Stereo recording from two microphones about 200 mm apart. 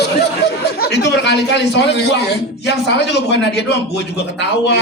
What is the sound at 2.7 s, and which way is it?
A man's voice, 60° left (ahead or behind).